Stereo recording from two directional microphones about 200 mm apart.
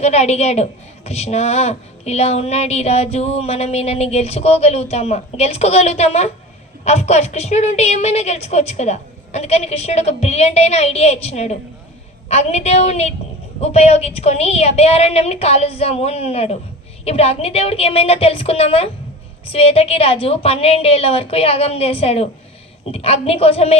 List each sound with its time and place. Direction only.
0.0 s a woman's voice: 35° left (ahead or behind)